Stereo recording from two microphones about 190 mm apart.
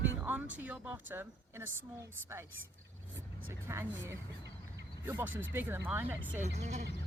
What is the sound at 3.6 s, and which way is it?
Speech, 15° right (ahead or behind).